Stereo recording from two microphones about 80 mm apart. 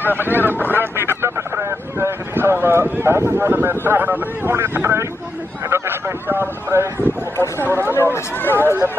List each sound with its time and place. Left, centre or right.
0.1 s speech: right
7.9 s speech: left
8.5 s speech: right